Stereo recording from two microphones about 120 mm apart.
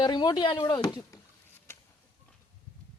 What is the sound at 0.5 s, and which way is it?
Speech, 25° left (ahead or behind).